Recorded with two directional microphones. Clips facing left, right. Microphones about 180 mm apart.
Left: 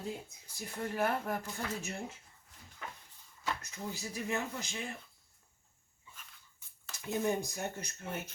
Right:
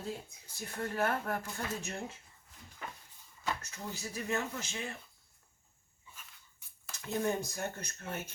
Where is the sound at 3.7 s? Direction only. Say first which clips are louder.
Left 1 dB; 15° left (ahead or behind).